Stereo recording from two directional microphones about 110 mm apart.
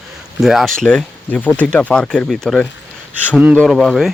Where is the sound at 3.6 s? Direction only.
Centre (ahead or behind).